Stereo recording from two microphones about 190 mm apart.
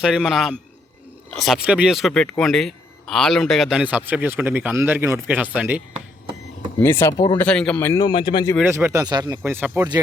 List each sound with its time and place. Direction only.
0.0 s speech: 5° right (ahead or behind)
6.7 s speech: 10° left (ahead or behind)
7.4 s speech: 5° left (ahead or behind)
8.0 s speech: 25° left (ahead or behind)
8.6 s speech: 15° right (ahead or behind)